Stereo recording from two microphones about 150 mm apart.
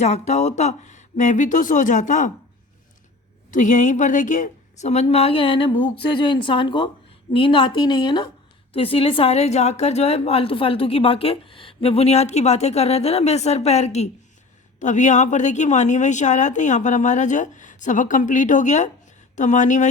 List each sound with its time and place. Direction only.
0.0 s a woman's voice: 50° left (ahead or behind)
3.5 s a woman's voice: 55° left (ahead or behind)